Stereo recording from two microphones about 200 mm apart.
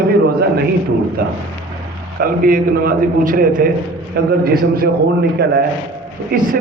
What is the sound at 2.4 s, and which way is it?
A man's voice, 45° right (ahead or behind).